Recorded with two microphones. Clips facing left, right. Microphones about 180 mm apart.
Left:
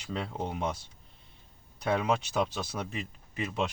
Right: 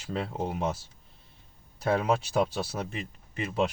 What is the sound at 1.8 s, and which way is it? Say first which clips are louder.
Speech: right 2 dB; 5° right (ahead or behind).